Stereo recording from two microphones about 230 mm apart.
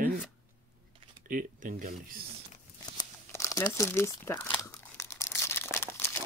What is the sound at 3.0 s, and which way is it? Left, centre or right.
Crumpling, centre.